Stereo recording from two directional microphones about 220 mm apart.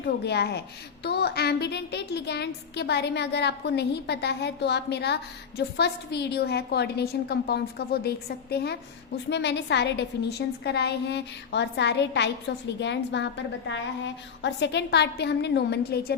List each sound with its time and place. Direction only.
0.0 s a woman's voice: 50° left (ahead or behind)